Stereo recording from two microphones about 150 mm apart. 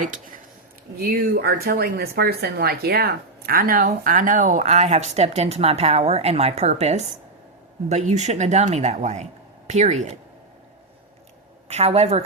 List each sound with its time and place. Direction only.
0.9 s speech: 90° right; by 3.8 s 75° right (ahead or behind)
3.8 s speech: 60° right (ahead or behind); by 10.2 s 45° right (ahead or behind)
11.7 s speech: 45° right (ahead or behind)